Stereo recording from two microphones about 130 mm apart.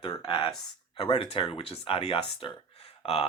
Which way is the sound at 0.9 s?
50° left (ahead or behind).